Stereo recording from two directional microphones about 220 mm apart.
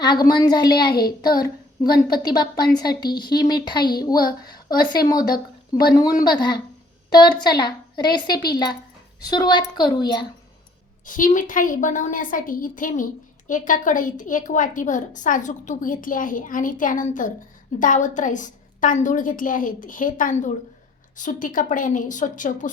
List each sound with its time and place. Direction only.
0.0 s a woman's voice: 20° left (ahead or behind)
1.9 s a woman's voice: 45° left (ahead or behind)
2.2 s a woman's voice: 20° left (ahead or behind)
11.0 s a woman's voice: 40° left (ahead or behind)